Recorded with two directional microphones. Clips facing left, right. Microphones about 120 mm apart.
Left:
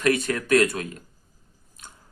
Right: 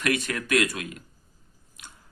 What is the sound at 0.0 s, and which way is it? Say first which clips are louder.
Speech: left 5 dB; 35° left (ahead or behind).